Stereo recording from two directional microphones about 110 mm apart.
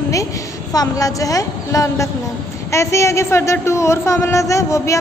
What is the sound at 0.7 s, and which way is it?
A woman's voice, 35° left (ahead or behind).